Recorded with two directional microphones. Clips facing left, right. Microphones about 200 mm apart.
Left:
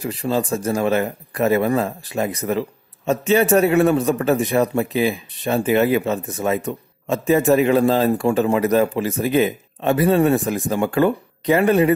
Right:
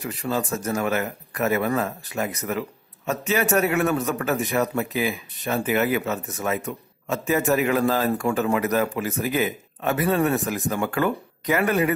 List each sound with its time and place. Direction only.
0.0 s a man's voice: 30° left (ahead or behind)